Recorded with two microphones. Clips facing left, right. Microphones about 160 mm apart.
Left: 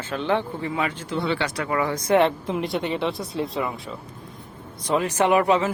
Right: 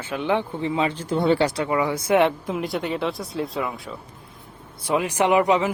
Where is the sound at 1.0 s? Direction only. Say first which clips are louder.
Right 5 dB; 45° right (ahead or behind).